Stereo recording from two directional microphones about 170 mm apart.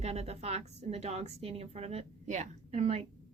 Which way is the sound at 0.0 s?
40° right (ahead or behind).